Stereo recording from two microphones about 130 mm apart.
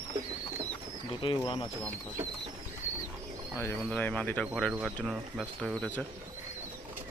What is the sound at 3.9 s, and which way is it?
Speech, 10° left (ahead or behind).